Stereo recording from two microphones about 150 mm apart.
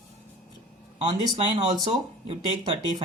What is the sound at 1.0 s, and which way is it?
Speech, 25° right (ahead or behind).